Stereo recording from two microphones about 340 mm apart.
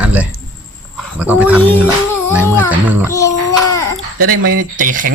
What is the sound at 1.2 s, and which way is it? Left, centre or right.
Speech, centre.